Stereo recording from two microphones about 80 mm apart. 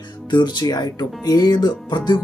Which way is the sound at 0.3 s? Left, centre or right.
Left.